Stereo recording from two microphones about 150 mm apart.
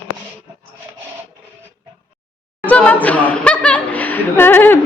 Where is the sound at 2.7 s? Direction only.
10° left (ahead or behind).